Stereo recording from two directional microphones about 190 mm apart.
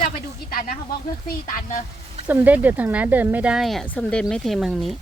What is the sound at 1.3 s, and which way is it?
Speech, 45° left (ahead or behind).